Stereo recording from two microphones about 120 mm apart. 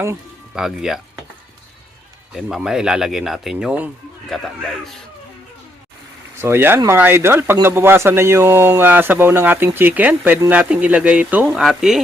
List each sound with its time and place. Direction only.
0.5 s speech: 5° right (ahead or behind)
2.3 s speech: 5° right (ahead or behind)
4.3 s speech: 5° left (ahead or behind)
6.4 s speech: 20° right (ahead or behind)